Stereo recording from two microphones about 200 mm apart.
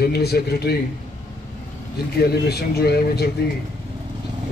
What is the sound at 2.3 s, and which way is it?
A man's voice, 50° left (ahead or behind).